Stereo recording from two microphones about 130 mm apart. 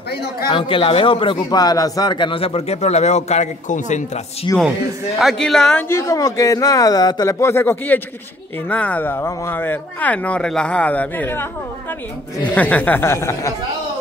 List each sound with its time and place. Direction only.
0.5 s a man's voice: 40° left (ahead or behind); by 4.5 s 60° left (ahead or behind)
5.2 s speech: 5° left (ahead or behind)
5.9 s speech: 25° left (ahead or behind)
12.5 s speech: 10° left (ahead or behind)